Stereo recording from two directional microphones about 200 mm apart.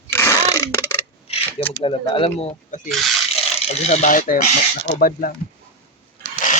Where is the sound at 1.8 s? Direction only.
25° left (ahead or behind); by 5.3 s 45° left (ahead or behind).